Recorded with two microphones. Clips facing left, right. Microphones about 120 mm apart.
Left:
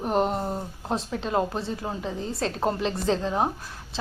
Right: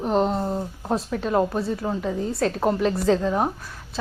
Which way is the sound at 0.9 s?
25° left (ahead or behind).